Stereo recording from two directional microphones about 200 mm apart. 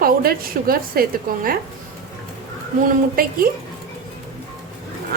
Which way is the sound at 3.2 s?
45° right (ahead or behind).